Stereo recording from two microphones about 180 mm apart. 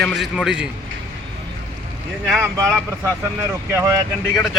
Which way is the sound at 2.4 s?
10° right (ahead or behind).